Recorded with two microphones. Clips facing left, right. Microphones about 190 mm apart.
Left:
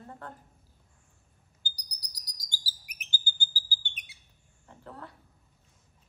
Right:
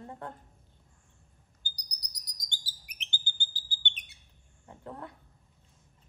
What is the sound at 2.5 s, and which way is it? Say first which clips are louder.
Chirp: left 3 dB; 5° left (ahead or behind).